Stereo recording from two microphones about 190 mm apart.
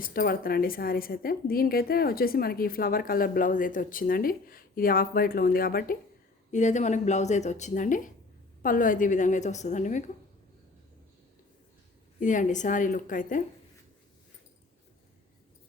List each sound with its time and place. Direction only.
0.0 s a woman's voice: 50° left (ahead or behind)
6.5 s speech: 40° left (ahead or behind)
12.2 s a woman's voice: 40° left (ahead or behind)